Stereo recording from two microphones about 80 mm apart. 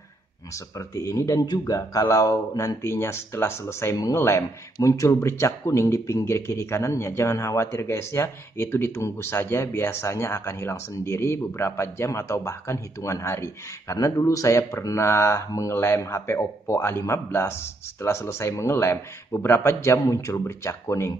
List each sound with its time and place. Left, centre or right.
0.7 s speech: left
1.4 s speech: left
3.9 s speech: left
4.2 s speech: left